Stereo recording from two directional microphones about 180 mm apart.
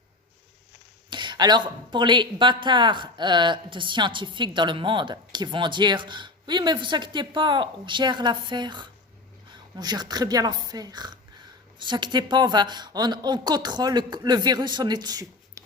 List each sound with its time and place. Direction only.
1.1 s speech: 25° right (ahead or behind)